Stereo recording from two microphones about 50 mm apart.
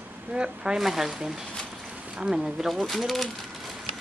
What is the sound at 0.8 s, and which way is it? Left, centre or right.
Speech, centre.